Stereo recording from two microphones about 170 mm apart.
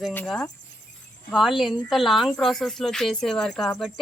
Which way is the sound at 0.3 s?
5° left (ahead or behind).